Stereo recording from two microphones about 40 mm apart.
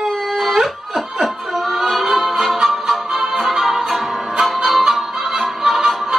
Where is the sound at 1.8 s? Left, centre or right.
Centre.